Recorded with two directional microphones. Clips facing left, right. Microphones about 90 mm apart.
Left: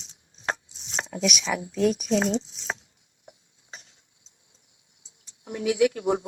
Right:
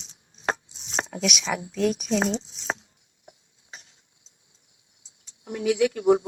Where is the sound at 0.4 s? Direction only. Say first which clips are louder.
Right 3 dB; 40° right (ahead or behind).